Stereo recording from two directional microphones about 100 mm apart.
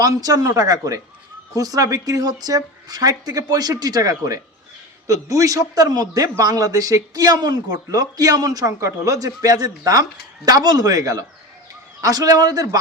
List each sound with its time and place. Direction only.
0.0 s speech: 40° right (ahead or behind)